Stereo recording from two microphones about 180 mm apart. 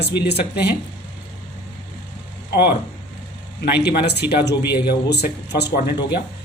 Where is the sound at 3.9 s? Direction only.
65° left (ahead or behind).